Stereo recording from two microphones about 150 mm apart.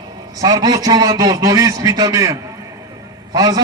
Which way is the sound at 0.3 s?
25° right (ahead or behind).